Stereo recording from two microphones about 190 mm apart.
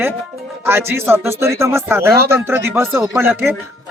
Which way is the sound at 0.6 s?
10° right (ahead or behind).